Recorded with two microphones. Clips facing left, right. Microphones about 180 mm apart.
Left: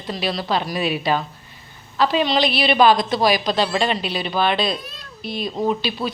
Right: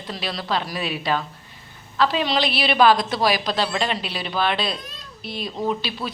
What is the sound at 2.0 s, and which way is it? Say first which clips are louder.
A woman's voice: left 3 dB; centre (ahead or behind).